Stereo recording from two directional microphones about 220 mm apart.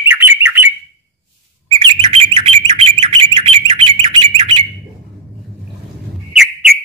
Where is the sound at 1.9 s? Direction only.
25° right (ahead or behind).